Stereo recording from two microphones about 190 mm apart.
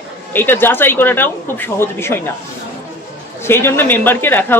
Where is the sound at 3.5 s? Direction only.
10° left (ahead or behind).